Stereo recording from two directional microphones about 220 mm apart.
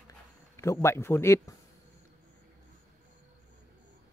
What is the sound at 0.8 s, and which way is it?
Speech, 10° left (ahead or behind).